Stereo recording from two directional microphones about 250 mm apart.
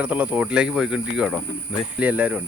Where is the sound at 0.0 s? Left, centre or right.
Centre.